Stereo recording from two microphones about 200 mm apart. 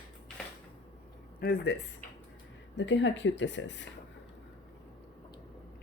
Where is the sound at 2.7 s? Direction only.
65° left (ahead or behind).